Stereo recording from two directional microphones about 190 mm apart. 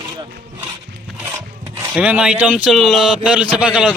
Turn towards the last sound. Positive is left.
turn(degrees=-5)  # may be behind; listen again after turning